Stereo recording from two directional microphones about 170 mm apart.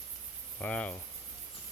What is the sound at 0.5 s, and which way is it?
Speech, 10° left (ahead or behind).